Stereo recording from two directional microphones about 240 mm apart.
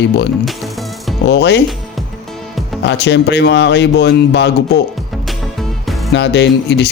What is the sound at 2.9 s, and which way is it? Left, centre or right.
Speech, left.